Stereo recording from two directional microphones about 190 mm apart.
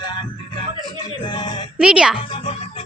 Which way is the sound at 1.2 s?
25° left (ahead or behind).